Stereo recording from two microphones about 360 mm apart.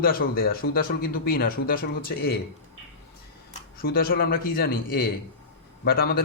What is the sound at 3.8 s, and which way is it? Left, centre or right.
Speech, left.